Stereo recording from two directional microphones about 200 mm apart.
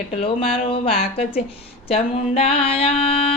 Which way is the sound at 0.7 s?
30° left (ahead or behind).